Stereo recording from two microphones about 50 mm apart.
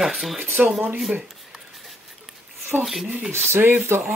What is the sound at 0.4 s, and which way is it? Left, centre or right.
Speech, right.